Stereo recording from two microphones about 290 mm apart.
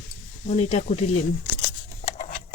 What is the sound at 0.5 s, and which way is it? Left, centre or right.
Speech, left.